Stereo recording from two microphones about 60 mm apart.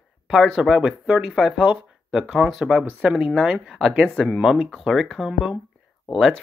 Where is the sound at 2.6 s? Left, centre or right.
Centre.